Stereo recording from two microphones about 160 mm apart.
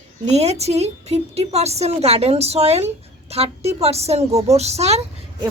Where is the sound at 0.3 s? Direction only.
40° right (ahead or behind).